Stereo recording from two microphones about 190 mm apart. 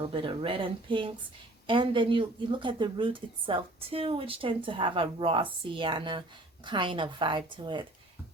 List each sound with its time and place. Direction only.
0.0 s a woman's voice: 25° right (ahead or behind)